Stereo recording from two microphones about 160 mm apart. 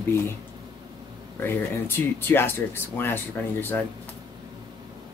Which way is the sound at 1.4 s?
15° left (ahead or behind).